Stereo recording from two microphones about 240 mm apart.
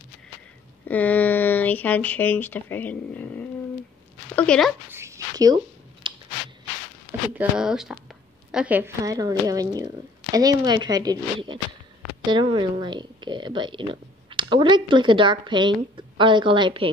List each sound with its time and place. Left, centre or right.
0.8 s speech: centre
4.9 s a sound: centre
7.3 s speech: centre; by 16.9 s right